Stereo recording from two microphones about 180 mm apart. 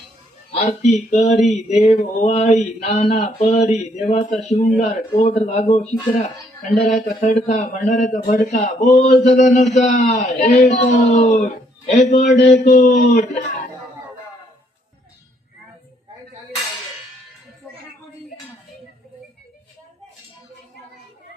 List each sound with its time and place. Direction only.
0.5 s a man's voice: 35° left (ahead or behind)